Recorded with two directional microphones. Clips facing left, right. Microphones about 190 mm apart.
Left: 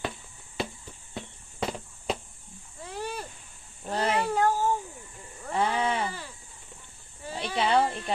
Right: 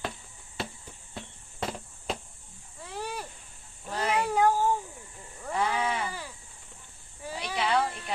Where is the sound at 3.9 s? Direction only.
35° left (ahead or behind).